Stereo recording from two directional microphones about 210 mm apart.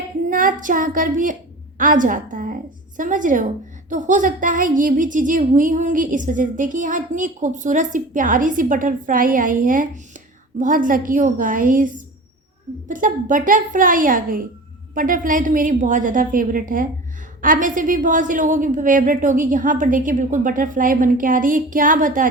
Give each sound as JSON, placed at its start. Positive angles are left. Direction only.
{"t": 0.3, "sound": "a woman's voice", "side_deg": -40}